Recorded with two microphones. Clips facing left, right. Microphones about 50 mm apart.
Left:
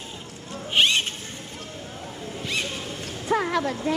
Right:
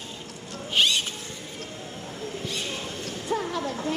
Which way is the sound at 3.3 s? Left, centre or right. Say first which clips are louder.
Left 5 dB; left.